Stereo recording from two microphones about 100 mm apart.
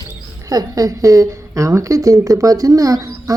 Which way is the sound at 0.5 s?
35° right (ahead or behind).